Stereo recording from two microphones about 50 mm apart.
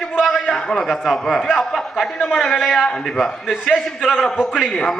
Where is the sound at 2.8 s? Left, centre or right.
Centre.